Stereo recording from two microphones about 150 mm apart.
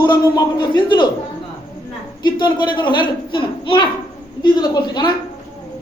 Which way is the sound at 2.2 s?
30° left (ahead or behind).